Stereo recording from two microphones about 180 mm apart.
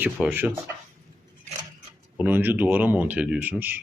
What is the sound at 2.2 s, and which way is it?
A man's voice, 10° right (ahead or behind).